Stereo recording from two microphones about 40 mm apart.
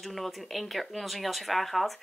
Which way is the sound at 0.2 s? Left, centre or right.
Centre.